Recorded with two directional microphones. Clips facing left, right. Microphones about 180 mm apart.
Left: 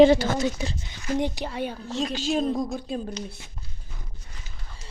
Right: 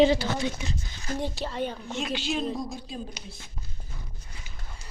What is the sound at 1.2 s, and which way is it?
Speech, 15° left (ahead or behind).